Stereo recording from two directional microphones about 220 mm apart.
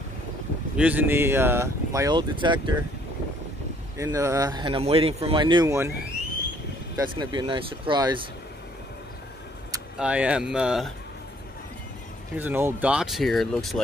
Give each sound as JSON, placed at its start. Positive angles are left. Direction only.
{"t": 0.7, "sound": "speech", "side_deg": -5}
{"t": 4.0, "sound": "speech", "side_deg": -15}
{"t": 7.0, "sound": "speech", "side_deg": -20}
{"t": 9.9, "sound": "speech", "side_deg": -5}
{"t": 12.4, "sound": "speech", "side_deg": -10}